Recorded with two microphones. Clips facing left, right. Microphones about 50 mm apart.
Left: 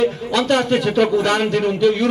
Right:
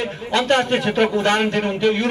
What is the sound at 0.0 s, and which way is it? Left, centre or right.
A man's voice, right.